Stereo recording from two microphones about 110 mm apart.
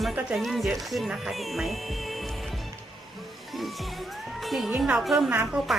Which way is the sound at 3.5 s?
Centre (ahead or behind).